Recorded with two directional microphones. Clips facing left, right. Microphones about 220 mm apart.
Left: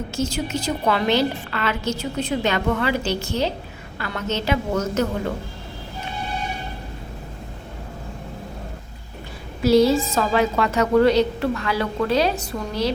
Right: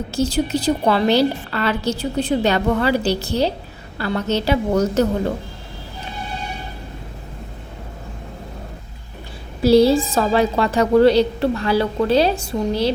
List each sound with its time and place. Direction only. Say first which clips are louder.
0.1 s a woman's voice: right 7 dB; 35° right (ahead or behind)
9.6 s a woman's voice: right 3 dB; 30° right (ahead or behind)